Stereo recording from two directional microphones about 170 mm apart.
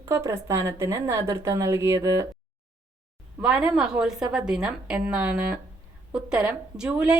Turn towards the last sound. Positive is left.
turn(degrees=-5)  # may be behind; listen again after turning